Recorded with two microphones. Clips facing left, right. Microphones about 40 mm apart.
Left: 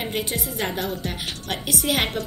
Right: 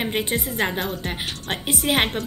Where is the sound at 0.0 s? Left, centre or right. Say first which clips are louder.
Right 3 dB; right.